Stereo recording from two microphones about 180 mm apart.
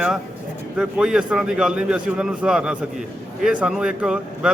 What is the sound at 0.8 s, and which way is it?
A man's voice, 5° right (ahead or behind).